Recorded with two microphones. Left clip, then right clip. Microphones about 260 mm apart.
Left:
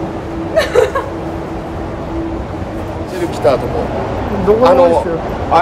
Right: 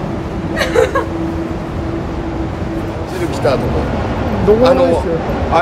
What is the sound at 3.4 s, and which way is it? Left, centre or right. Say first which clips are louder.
Speech: left 3 dB; left.